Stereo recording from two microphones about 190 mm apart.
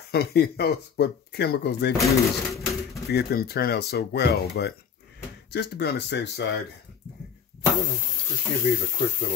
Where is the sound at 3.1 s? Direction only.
60° left (ahead or behind).